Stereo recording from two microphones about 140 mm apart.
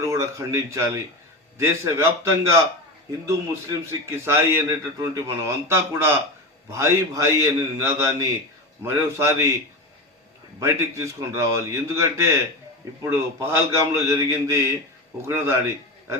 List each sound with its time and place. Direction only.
0.0 s a man's voice: 20° right (ahead or behind)
3.2 s a man's voice: 20° right (ahead or behind)
10.6 s a man's voice: 20° right (ahead or behind)